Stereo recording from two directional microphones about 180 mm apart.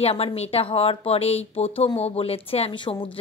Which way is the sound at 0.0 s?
35° left (ahead or behind).